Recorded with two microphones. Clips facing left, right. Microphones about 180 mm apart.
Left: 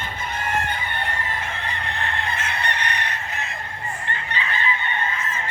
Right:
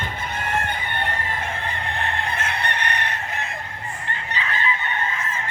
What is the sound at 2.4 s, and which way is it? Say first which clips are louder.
Chicken: right 1 dB; 55° right (ahead or behind).